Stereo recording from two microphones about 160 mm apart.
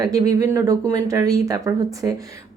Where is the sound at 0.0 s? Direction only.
20° right (ahead or behind).